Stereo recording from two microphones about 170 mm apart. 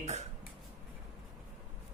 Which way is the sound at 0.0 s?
40° right (ahead or behind).